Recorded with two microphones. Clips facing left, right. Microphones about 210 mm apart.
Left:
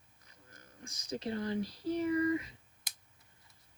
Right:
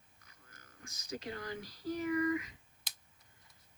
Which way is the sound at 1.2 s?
30° left (ahead or behind).